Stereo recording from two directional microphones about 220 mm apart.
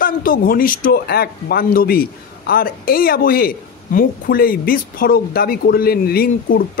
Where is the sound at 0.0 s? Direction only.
40° left (ahead or behind).